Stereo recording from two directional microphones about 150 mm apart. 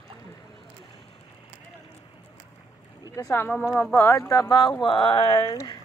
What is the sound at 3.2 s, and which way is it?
Speech, 15° left (ahead or behind).